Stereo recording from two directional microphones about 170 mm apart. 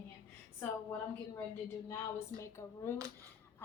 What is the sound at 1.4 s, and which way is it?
A woman's voice, 15° left (ahead or behind).